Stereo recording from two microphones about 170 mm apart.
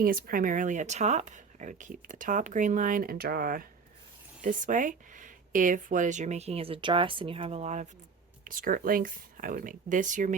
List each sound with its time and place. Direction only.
0.0 s speech: 60° right (ahead or behind); by 7.9 s 40° right (ahead or behind)
8.4 s speech: 55° right (ahead or behind)